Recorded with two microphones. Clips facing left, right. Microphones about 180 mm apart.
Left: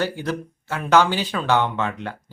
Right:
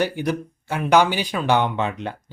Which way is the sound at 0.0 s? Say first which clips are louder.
Right 2 dB; 15° right (ahead or behind).